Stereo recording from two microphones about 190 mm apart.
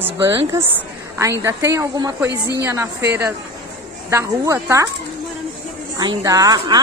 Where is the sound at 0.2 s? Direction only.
15° right (ahead or behind).